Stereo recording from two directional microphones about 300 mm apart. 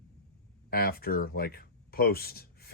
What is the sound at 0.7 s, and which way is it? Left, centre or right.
Speech, left.